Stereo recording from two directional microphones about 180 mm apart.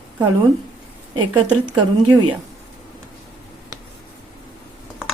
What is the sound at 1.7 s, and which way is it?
Speech, 25° right (ahead or behind).